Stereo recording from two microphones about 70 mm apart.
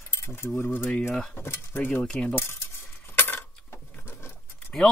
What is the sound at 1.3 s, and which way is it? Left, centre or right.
Cutlery, left.